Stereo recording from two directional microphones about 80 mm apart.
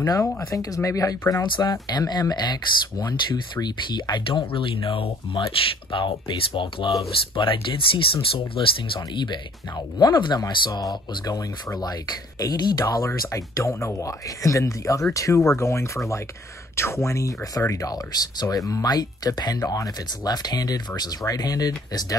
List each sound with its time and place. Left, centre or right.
0.6 s speech: left
1.3 s speech: left
13.0 s speech: left